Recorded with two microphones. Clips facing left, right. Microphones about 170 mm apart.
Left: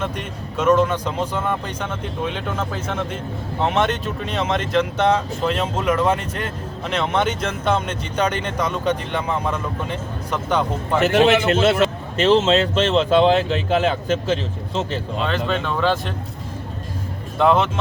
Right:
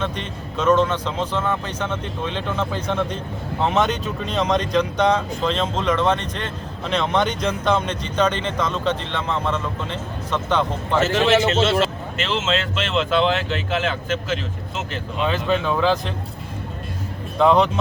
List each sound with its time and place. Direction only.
0.0 s speech: 10° left (ahead or behind)
11.3 s a man's voice: 55° left (ahead or behind)
12.1 s speech: 40° left (ahead or behind)
15.3 s speech: centre (ahead or behind)
17.3 s speech: centre (ahead or behind)